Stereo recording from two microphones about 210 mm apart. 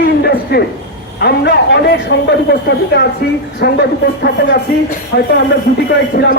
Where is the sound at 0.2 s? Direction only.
50° left (ahead or behind).